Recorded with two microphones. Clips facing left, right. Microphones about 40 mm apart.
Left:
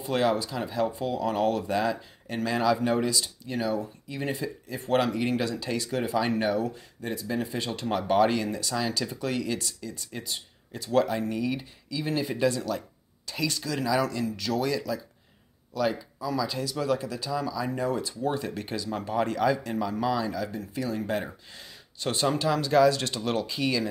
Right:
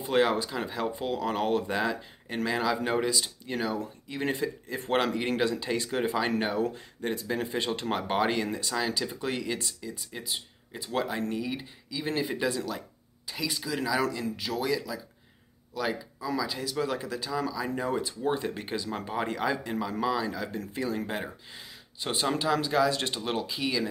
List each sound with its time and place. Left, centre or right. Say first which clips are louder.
0.0 s speech: even; right
1.2 s speech: left 2 dB; right
6.5 s speech: left 1 dB; right
8.7 s speech: even; centre
9.2 s speech: left 4 dB; right
10.1 s speech: even; centre
16.6 s speech: left 3 dB; right
17.8 s speech: even; right; by 20.3 s centre
20.3 s speech: left 2 dB; right
20.9 s speech: left 3 dB; centre
22.8 s speech: left 4 dB; right
23.4 s speech: left 2 dB; centre